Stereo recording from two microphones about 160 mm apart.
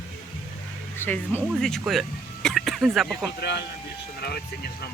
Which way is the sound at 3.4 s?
90° left.